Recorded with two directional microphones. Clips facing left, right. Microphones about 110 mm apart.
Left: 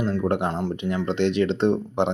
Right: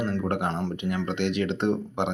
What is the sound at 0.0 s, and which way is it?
Speech, 20° left (ahead or behind).